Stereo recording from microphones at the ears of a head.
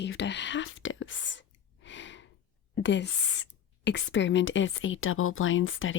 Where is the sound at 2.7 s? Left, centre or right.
Left.